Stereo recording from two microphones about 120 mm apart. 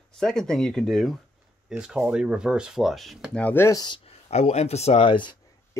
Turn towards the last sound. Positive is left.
turn(degrees=45)  # may be behind; listen again after turning